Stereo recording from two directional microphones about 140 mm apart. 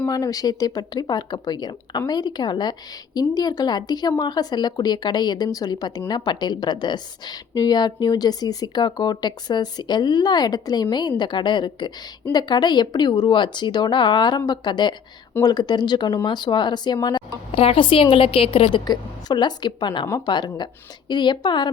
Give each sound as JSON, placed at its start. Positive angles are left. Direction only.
{"t": 0.1, "sound": "a woman's voice", "side_deg": 25}
{"t": 17.5, "sound": "speech", "side_deg": 45}